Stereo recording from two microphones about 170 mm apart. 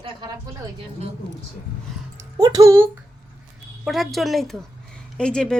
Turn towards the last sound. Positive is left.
turn(degrees=5)  # may be behind; listen again after turning